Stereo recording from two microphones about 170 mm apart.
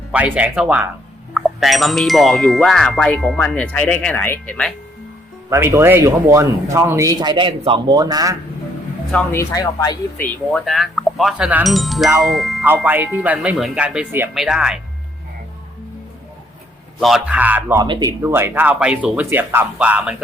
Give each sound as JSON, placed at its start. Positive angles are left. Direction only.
{"t": 0.1, "sound": "speech", "side_deg": -10}
{"t": 1.3, "sound": "music", "side_deg": 0}
{"t": 5.5, "sound": "a man's voice", "side_deg": -15}
{"t": 9.1, "sound": "speech", "side_deg": 15}
{"t": 10.2, "sound": "music", "side_deg": 5}
{"t": 12.2, "sound": "speech", "side_deg": 0}
{"t": 12.6, "sound": "speech", "side_deg": -10}
{"t": 14.3, "sound": "music", "side_deg": -5}
{"t": 17.0, "sound": "speech", "side_deg": 0}
{"t": 17.7, "sound": "a man's voice", "side_deg": -25}
{"t": 18.2, "sound": "speech", "side_deg": -15}